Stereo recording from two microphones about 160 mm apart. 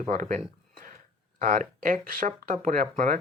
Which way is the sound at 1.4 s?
55° right (ahead or behind).